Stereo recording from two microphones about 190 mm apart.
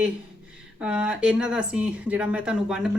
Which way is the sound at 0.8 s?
5° right (ahead or behind).